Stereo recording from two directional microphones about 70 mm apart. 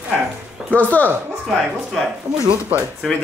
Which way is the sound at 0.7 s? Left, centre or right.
Left.